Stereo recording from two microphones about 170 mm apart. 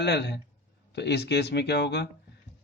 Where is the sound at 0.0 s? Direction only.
85° left.